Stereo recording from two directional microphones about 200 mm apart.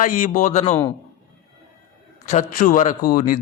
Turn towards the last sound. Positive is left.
turn(degrees=45)  # may be behind; listen again after turning